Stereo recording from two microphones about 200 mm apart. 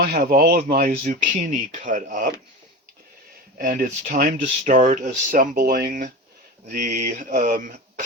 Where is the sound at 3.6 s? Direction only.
45° right (ahead or behind).